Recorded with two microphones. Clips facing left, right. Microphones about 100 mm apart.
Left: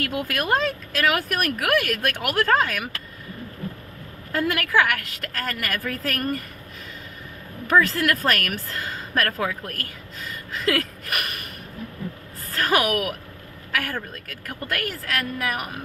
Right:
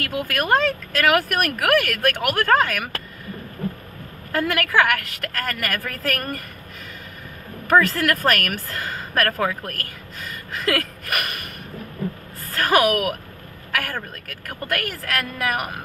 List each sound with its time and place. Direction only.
0.1 s speech: centre (ahead or behind)
0.3 s speech: 55° right (ahead or behind)
4.3 s speech: 55° right (ahead or behind)
7.7 s speech: 55° right (ahead or behind)
12.5 s speech: 55° right (ahead or behind)